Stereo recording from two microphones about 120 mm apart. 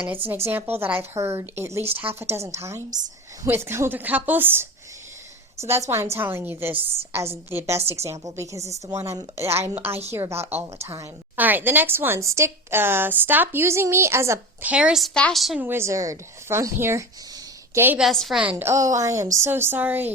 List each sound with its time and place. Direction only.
0.3 s a woman's voice: 20° right (ahead or behind)
14.7 s a woman's voice: 10° right (ahead or behind)
15.1 s a woman's voice: 5° left (ahead or behind)
15.6 s a woman's voice: 20° right (ahead or behind)
18.0 s a woman's voice: centre (ahead or behind)
18.5 s a woman's voice: 25° right (ahead or behind)